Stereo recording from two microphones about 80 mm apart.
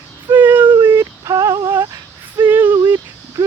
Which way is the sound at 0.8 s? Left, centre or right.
Right.